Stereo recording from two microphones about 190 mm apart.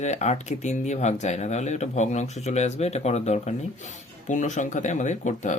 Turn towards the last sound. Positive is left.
turn(degrees=40)  # may be behind; listen again after turning